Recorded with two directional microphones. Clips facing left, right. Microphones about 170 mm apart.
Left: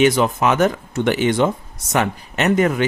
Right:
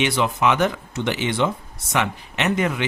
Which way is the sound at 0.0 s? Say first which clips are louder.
Left 5 dB; 45° left (ahead or behind).